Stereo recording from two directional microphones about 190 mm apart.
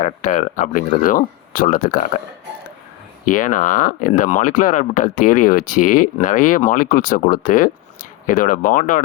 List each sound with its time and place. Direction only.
0.0 s speech: 45° left (ahead or behind)
3.2 s speech: 45° left (ahead or behind)